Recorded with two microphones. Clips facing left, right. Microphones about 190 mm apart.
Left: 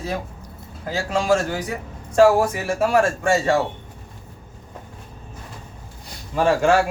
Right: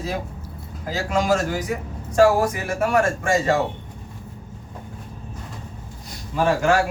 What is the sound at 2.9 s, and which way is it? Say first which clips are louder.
Speech: left 1 dB; 30° left (ahead or behind).